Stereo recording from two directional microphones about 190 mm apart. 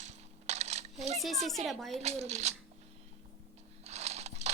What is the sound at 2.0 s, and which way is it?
Speech, 35° right (ahead or behind).